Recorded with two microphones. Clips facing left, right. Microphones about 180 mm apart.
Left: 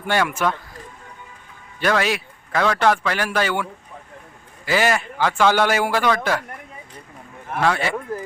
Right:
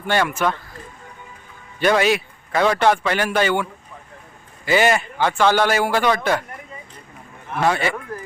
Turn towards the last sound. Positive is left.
turn(degrees=0)  # may be behind; listen again after turning